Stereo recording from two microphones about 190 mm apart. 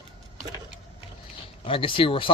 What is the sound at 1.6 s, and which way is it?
Speech, 25° left (ahead or behind).